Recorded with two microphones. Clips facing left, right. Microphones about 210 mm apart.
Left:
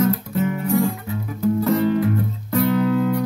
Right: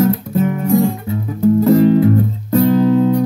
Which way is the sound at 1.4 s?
30° right (ahead or behind).